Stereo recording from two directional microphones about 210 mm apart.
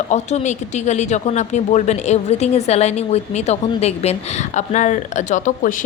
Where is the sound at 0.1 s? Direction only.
35° left (ahead or behind).